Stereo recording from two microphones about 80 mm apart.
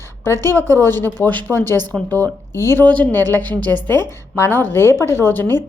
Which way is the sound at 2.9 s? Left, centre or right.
Centre.